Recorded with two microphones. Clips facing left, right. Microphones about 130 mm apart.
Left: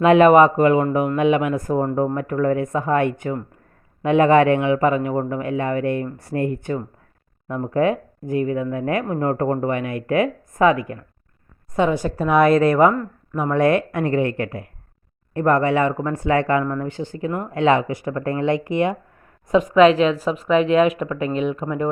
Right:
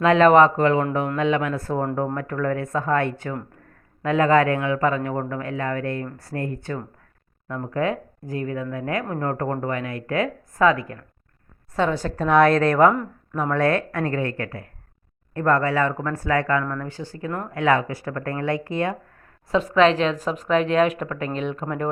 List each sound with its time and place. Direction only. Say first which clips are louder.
0.0 s a man's voice: left 3 dB; 15° left (ahead or behind)